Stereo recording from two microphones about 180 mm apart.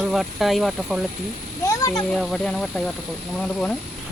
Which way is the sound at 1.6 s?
15° left (ahead or behind).